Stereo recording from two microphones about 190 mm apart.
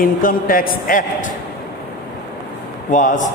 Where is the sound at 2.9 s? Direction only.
40° left (ahead or behind).